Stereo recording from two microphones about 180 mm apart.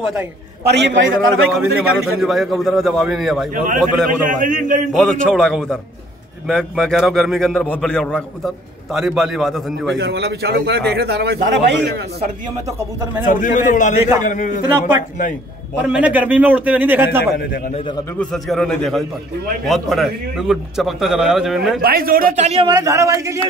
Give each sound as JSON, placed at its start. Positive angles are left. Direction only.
{"t": 0.7, "sound": "a man's voice", "side_deg": -75}
{"t": 1.5, "sound": "a man's voice", "side_deg": 0}
{"t": 4.2, "sound": "a man's voice", "side_deg": -45}
{"t": 5.2, "sound": "a man's voice", "side_deg": 0}
{"t": 9.9, "sound": "a man's voice", "side_deg": -65}
{"t": 13.2, "sound": "a man's voice", "side_deg": 45}
{"t": 15.8, "sound": "a man's voice", "side_deg": -5}
{"t": 18.3, "sound": "a man's voice", "side_deg": 0}
{"t": 21.8, "sound": "a man's voice", "side_deg": -55}